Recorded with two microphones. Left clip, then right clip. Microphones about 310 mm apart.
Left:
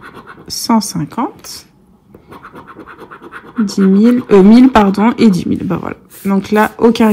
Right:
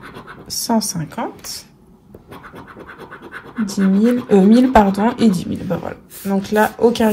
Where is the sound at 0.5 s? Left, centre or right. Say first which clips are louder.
Left 5 dB; left.